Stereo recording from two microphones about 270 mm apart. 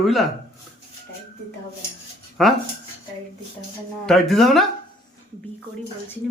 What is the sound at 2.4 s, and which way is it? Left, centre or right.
Speech, centre.